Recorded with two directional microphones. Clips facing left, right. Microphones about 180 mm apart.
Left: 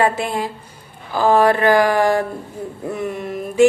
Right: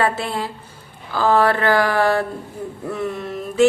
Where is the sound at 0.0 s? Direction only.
15° left (ahead or behind).